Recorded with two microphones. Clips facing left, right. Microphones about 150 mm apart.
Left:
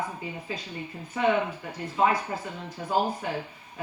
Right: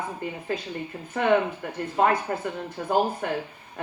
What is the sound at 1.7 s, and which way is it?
Speech, 55° right (ahead or behind).